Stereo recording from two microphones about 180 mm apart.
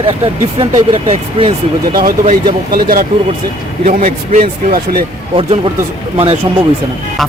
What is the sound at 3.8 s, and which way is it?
Speech, 40° right (ahead or behind).